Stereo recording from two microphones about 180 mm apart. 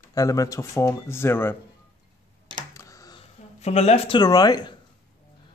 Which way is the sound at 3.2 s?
35° left (ahead or behind).